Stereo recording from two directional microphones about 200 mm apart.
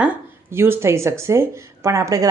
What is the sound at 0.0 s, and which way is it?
Speech, 10° right (ahead or behind).